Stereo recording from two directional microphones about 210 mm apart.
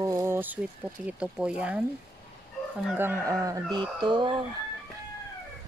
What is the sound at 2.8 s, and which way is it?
Speech, 10° right (ahead or behind).